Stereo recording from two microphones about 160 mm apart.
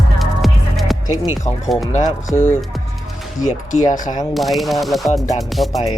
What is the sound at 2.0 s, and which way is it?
Speech, 25° left (ahead or behind).